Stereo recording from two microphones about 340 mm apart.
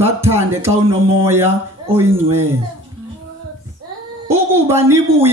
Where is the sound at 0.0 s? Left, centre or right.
Centre.